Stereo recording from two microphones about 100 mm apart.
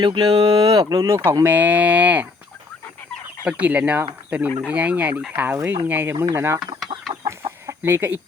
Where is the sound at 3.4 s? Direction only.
15° right (ahead or behind).